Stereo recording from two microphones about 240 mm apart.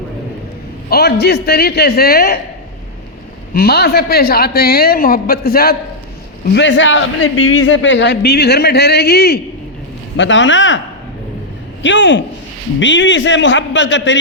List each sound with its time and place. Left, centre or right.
0.9 s a woman's voice: left
3.5 s a woman's voice: left
11.8 s a man's voice: left